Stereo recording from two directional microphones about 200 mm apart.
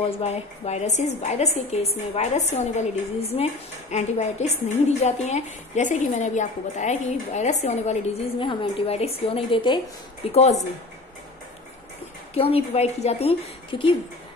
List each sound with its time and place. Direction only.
0.2 s a woman's voice: 35° left (ahead or behind)
3.9 s a woman's voice: 35° left (ahead or behind)
12.4 s a woman's voice: 30° left (ahead or behind)